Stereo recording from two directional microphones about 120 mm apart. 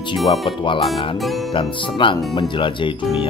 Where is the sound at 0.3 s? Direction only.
45° left (ahead or behind).